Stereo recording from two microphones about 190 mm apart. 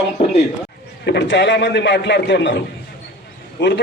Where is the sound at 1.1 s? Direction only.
60° left (ahead or behind).